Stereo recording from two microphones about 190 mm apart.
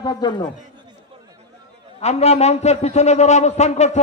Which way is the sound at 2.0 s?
35° left (ahead or behind).